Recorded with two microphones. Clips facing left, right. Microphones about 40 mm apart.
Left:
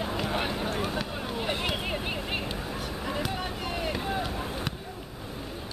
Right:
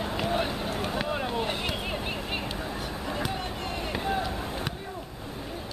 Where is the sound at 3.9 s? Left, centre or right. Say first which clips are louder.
Right 2 dB; centre.